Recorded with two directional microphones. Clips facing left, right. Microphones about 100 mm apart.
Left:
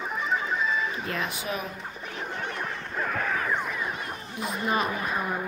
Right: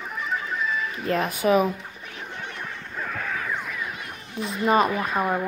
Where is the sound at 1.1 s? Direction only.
45° right (ahead or behind).